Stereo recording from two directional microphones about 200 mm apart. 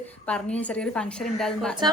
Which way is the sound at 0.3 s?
5° left (ahead or behind).